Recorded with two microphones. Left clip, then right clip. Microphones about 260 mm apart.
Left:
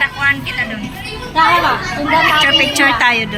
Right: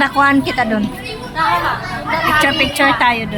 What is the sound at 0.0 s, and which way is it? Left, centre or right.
Speech, right.